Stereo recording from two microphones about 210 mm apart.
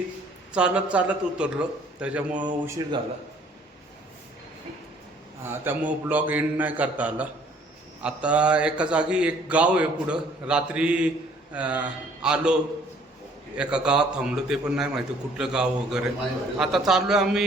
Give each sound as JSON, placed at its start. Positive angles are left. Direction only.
{"t": 0.5, "sound": "a man's voice", "side_deg": -5}
{"t": 5.4, "sound": "a man's voice", "side_deg": -10}
{"t": 13.6, "sound": "a man's voice", "side_deg": -5}